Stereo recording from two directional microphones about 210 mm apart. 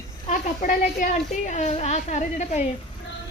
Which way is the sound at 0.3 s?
40° left (ahead or behind).